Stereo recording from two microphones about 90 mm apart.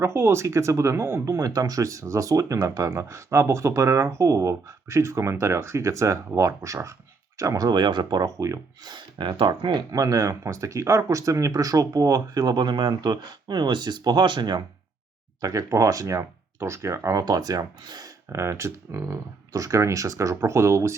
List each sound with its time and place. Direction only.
0.0 s speech: 30° right (ahead or behind)
8.8 s speech: 55° right (ahead or behind)
9.9 s speech: 40° right (ahead or behind); by 14.6 s 55° right (ahead or behind)
15.4 s speech: 35° right (ahead or behind)
18.3 s speech: 30° right (ahead or behind)